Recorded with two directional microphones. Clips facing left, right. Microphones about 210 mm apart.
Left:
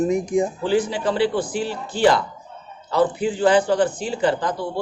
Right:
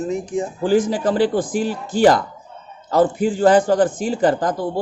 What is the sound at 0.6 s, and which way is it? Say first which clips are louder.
A man's voice: right 3 dB; 45° right (ahead or behind).